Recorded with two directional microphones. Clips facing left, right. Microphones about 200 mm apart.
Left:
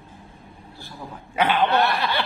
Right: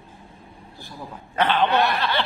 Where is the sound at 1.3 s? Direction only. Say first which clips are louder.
Even; 10° left (ahead or behind).